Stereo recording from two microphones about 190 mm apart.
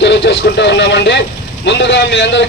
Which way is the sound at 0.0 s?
65° left (ahead or behind).